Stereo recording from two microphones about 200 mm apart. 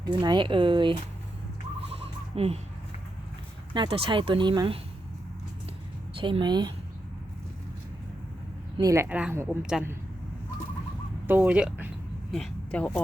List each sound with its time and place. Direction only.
0.0 s speech: 20° right (ahead or behind)
2.3 s speech: 30° right (ahead or behind)
3.8 s speech: 25° right (ahead or behind)
6.1 s speech: 25° right (ahead or behind)
8.8 s speech: 15° right (ahead or behind)
11.3 s speech: 10° right (ahead or behind)
12.3 s speech: 5° left (ahead or behind)